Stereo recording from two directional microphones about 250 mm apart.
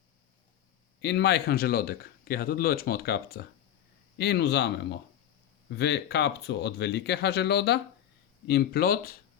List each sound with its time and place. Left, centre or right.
1.0 s speech: left